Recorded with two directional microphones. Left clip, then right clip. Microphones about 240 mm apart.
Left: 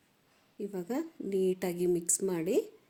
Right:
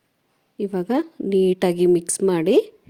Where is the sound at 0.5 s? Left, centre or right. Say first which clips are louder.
Right 13 dB; right.